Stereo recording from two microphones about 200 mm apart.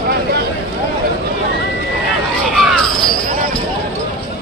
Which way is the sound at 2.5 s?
Centre (ahead or behind).